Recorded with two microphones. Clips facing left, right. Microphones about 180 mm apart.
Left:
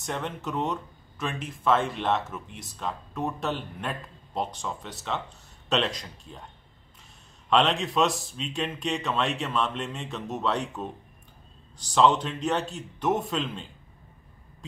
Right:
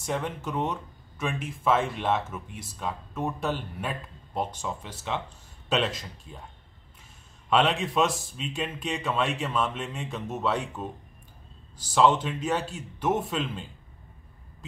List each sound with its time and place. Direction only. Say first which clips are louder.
0.0 s speech: right 2 dB; 10° right (ahead or behind)
7.4 s speech: even; 5° right (ahead or behind)